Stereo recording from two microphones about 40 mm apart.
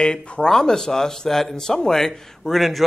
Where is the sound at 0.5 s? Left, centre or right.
Centre.